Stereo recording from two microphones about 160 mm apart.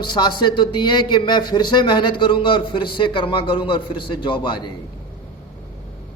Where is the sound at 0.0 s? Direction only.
30° left (ahead or behind).